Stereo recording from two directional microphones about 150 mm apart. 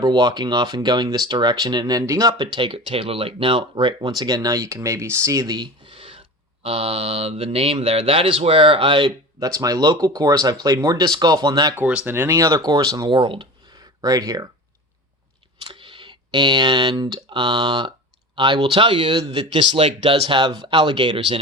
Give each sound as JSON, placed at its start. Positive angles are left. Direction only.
{"t": 0.0, "sound": "speech", "side_deg": -30}
{"t": 5.9, "sound": "a sound", "side_deg": -35}
{"t": 6.6, "sound": "speech", "side_deg": -40}
{"t": 11.8, "sound": "speech", "side_deg": -10}
{"t": 15.6, "sound": "speech", "side_deg": -35}